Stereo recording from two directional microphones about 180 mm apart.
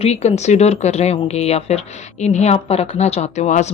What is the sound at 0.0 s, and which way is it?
A woman's voice, 35° left (ahead or behind).